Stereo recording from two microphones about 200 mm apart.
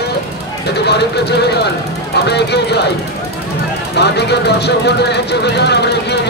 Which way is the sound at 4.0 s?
55° left (ahead or behind).